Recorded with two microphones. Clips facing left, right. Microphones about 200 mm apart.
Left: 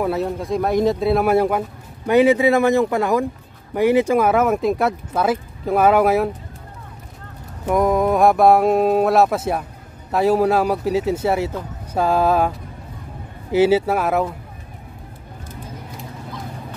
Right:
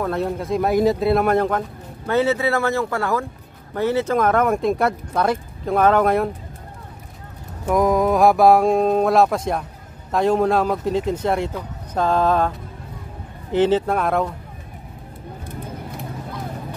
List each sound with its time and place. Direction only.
0.0 s speech: 5° left (ahead or behind)
7.6 s speech: centre (ahead or behind)